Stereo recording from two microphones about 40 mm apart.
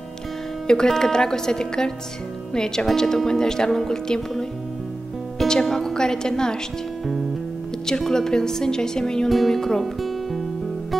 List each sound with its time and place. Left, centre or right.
0.7 s speech: centre
5.5 s speech: centre
8.0 s speech: centre
9.3 s music: centre